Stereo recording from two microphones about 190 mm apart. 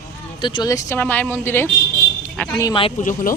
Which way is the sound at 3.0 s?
45° left (ahead or behind).